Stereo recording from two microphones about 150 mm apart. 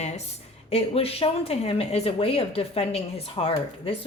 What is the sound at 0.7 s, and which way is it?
Speech, 40° left (ahead or behind).